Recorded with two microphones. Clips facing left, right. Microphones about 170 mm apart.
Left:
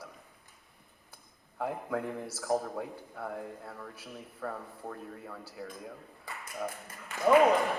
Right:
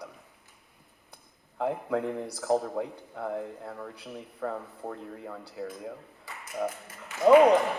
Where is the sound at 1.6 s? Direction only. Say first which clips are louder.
Right 5 dB; 20° right (ahead or behind).